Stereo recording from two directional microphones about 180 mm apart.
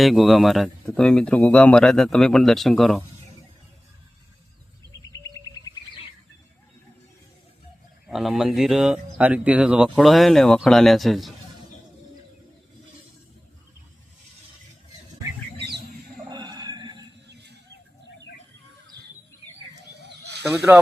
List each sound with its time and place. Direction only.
0.0 s speech: centre (ahead or behind)
8.0 s speech: centre (ahead or behind)
16.3 s a sound: 25° right (ahead or behind)
17.2 s a sound: 70° right (ahead or behind)
20.0 s snake: 70° right (ahead or behind)
20.4 s speech: 15° right (ahead or behind)